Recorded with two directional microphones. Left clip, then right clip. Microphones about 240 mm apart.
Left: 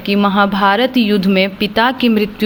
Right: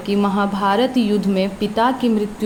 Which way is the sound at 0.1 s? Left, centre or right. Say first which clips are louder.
Left 6 dB; left.